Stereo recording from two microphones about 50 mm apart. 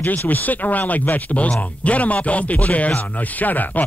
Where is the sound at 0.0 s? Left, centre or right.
Left.